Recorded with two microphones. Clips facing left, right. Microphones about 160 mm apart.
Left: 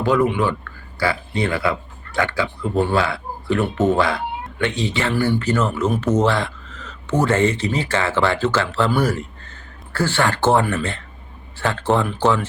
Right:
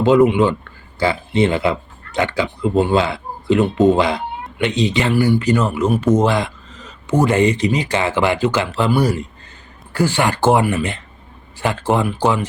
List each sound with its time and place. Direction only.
0.0 s speech: 20° right (ahead or behind)